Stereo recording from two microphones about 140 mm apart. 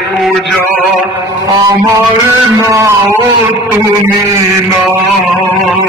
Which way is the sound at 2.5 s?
20° right (ahead or behind).